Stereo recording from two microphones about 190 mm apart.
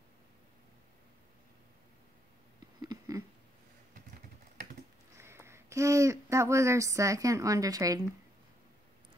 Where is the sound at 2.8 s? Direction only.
20° right (ahead or behind).